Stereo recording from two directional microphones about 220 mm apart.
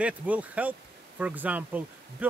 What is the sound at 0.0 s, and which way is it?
Speech, 5° right (ahead or behind).